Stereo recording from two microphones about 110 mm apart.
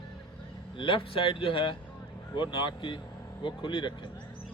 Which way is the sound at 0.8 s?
50° left (ahead or behind).